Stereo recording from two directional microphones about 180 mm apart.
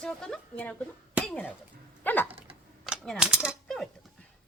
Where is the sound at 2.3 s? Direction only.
30° right (ahead or behind).